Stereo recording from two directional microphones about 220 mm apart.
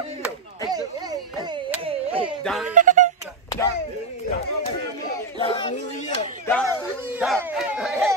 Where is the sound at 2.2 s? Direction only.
Centre (ahead or behind).